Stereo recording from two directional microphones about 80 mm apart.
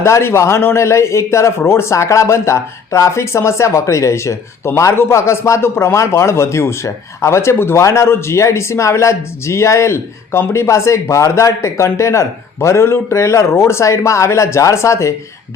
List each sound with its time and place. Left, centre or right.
0.0 s a man's voice: left